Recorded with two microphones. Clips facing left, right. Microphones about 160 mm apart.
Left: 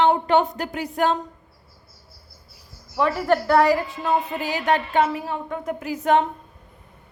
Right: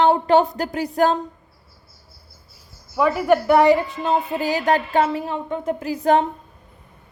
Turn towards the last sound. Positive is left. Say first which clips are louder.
# right 2 dB
turn(degrees=-35)  # may be behind; listen again after turning